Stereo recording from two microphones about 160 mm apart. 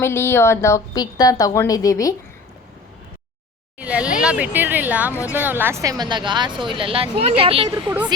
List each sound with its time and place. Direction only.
0.0 s a woman's voice: 15° left (ahead or behind)
3.8 s a sound: 10° right (ahead or behind)
4.2 s speech: 10° right (ahead or behind); by 7.7 s 35° right (ahead or behind)
7.7 s speech: 15° right (ahead or behind)